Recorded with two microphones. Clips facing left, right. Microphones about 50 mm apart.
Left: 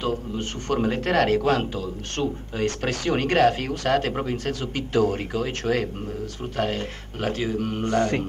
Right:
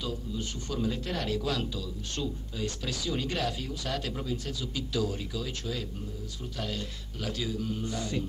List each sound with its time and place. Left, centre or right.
0.0 s speech: left